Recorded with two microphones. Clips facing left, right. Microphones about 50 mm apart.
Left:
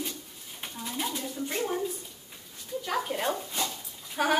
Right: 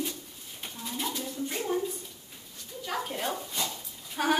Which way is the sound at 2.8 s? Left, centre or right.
Centre.